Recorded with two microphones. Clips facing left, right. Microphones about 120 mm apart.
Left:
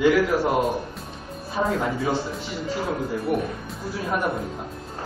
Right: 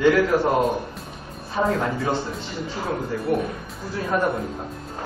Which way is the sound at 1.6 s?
5° left (ahead or behind).